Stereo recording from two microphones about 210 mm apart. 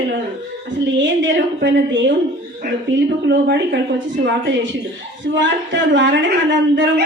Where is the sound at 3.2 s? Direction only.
55° right (ahead or behind).